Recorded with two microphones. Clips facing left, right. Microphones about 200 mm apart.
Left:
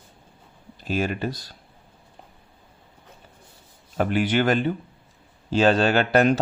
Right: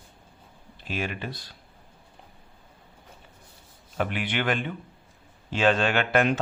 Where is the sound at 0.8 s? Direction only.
40° left (ahead or behind).